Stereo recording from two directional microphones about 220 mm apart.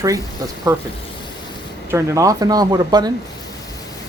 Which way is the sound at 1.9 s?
15° right (ahead or behind).